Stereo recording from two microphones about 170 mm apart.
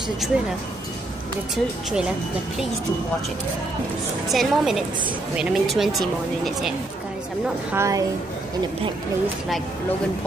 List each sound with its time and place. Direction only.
0.2 s speech: centre (ahead or behind)
4.3 s speech: centre (ahead or behind)
7.7 s a woman's voice: 15° right (ahead or behind)